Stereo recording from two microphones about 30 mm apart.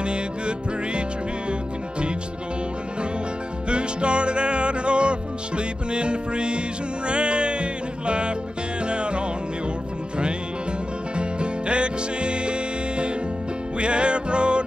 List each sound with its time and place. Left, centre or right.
0.0 s music: right
3.6 s music: right
11.1 s music: right